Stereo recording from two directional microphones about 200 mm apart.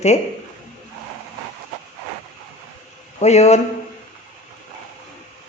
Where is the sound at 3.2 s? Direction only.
35° left (ahead or behind).